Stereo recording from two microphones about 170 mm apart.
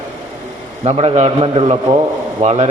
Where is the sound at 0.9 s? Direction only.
35° right (ahead or behind).